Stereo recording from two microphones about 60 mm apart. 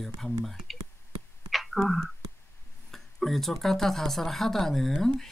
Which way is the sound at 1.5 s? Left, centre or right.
Centre.